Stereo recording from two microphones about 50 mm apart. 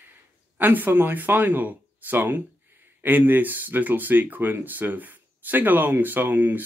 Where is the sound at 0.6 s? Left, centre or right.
Right.